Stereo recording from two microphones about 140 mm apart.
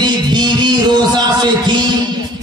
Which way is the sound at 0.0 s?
30° right (ahead or behind).